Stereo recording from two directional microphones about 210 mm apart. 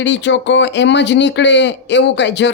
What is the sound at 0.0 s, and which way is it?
Speech, 60° left (ahead or behind).